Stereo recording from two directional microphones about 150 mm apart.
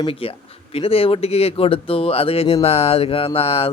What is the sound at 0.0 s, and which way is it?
A man's voice, 40° left (ahead or behind).